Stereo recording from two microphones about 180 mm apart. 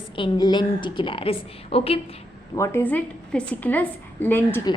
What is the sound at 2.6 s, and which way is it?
A woman's voice, 15° left (ahead or behind).